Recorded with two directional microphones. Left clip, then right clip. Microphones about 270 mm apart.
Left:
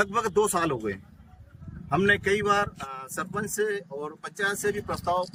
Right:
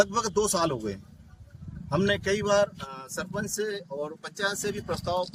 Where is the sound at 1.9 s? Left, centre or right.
Centre.